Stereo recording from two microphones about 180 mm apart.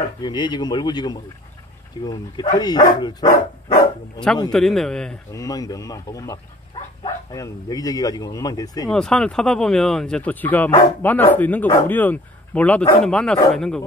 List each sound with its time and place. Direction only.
0.2 s speech: 25° left (ahead or behind)
4.5 s a man's voice: centre (ahead or behind)
5.3 s speech: 20° left (ahead or behind)
8.9 s a man's voice: 5° left (ahead or behind)